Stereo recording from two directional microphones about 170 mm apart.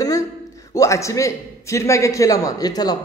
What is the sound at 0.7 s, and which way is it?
A man's voice, 15° left (ahead or behind).